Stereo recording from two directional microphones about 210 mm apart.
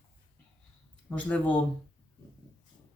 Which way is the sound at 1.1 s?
5° left (ahead or behind).